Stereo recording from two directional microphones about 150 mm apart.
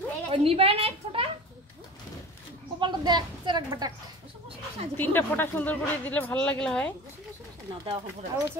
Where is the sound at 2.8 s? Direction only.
30° right (ahead or behind).